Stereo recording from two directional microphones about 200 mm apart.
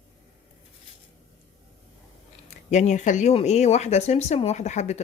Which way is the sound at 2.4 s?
35° left (ahead or behind).